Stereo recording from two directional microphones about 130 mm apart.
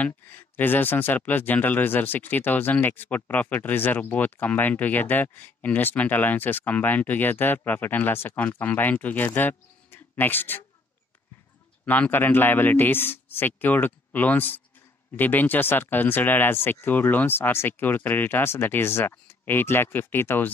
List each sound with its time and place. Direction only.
0.0 s speech: 15° left (ahead or behind)
11.8 s speech: 10° left (ahead or behind)